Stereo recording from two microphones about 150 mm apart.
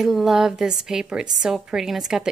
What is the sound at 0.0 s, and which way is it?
A woman's voice, centre (ahead or behind).